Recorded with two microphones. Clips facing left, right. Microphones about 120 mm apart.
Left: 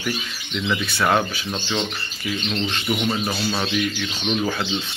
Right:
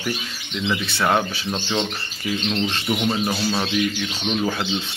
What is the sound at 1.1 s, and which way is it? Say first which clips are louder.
Speech: even; 15° right (ahead or behind).